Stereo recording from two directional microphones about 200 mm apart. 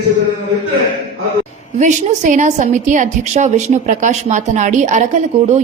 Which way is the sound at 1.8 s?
40° right (ahead or behind).